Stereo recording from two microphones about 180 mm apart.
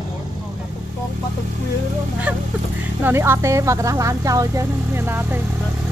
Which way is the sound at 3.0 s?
10° right (ahead or behind).